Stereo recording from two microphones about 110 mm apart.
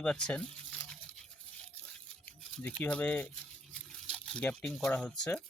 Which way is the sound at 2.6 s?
15° left (ahead or behind).